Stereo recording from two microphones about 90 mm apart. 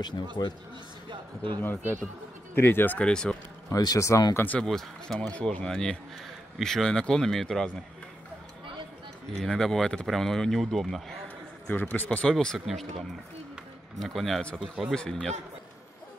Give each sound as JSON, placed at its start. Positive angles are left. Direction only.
{"t": 0.4, "sound": "speech", "side_deg": 35}
{"t": 1.6, "sound": "speech", "side_deg": 20}
{"t": 3.1, "sound": "speech", "side_deg": 10}
{"t": 3.7, "sound": "speech", "side_deg": 40}
{"t": 4.5, "sound": "speech", "side_deg": 5}
{"t": 9.4, "sound": "speech", "side_deg": 5}
{"t": 11.7, "sound": "speech", "side_deg": 20}
{"t": 12.3, "sound": "speech", "side_deg": 5}
{"t": 13.9, "sound": "speech", "side_deg": 0}
{"t": 15.0, "sound": "speech", "side_deg": 10}